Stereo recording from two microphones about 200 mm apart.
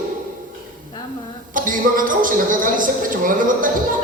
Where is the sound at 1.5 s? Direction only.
45° right (ahead or behind).